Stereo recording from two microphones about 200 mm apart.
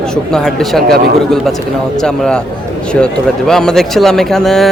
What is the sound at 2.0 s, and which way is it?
A man's voice, 5° left (ahead or behind).